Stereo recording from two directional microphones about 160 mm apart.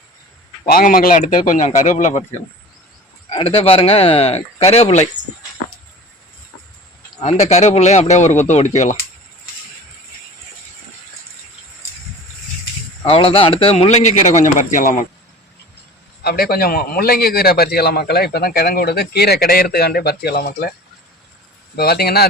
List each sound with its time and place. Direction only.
0.6 s speech: 70° left (ahead or behind); by 2.2 s 45° left (ahead or behind)
3.2 s a man's voice: 35° left (ahead or behind)
7.2 s speech: 45° left (ahead or behind)
13.1 s a man's voice: 35° left (ahead or behind); by 14.9 s 55° left (ahead or behind)
16.2 s a man's voice: 70° left (ahead or behind)
21.8 s a man's voice: 75° left (ahead or behind)